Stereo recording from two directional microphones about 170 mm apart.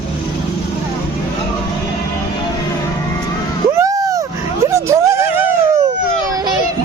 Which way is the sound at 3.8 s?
20° right (ahead or behind).